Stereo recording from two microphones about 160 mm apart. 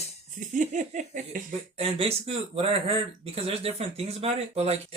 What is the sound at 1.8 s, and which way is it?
Speech, 40° right (ahead or behind).